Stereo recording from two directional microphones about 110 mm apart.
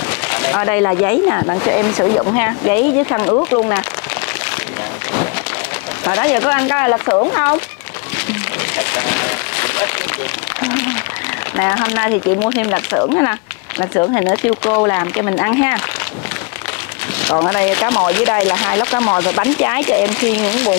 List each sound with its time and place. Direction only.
0.3 s speech: 20° left (ahead or behind)
6.0 s speech: 20° left (ahead or behind)
8.3 s music: 20° left (ahead or behind)
10.6 s speech: 20° left (ahead or behind)
17.4 s speech: 20° left (ahead or behind)